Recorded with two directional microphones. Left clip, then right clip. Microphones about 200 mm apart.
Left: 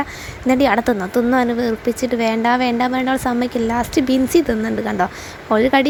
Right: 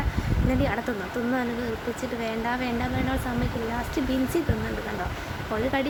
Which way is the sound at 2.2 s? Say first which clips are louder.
Left 12 dB; 40° left (ahead or behind).